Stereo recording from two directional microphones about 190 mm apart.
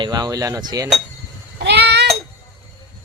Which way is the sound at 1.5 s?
60° right (ahead or behind).